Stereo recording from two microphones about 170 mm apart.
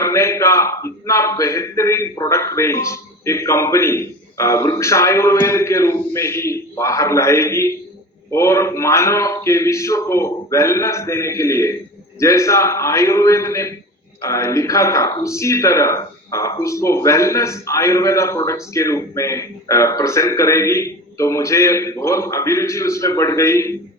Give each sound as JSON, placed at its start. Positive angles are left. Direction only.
{"t": 0.0, "sound": "a man's voice", "side_deg": 15}